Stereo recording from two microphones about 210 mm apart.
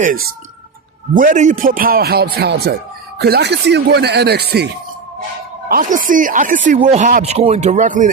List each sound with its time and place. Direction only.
0.0 s speech: 45° right (ahead or behind)